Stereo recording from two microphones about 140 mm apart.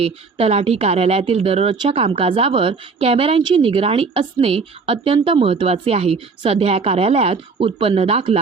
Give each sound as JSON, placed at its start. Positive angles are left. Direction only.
{"t": 0.0, "sound": "speech", "side_deg": -45}